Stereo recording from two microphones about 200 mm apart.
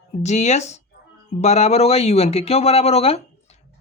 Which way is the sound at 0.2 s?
35° left (ahead or behind).